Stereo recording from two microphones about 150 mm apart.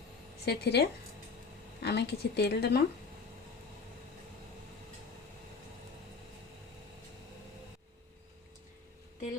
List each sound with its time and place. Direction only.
0.4 s a woman's voice: 90° left